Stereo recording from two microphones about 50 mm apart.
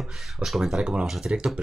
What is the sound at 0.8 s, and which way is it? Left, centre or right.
Speech, centre.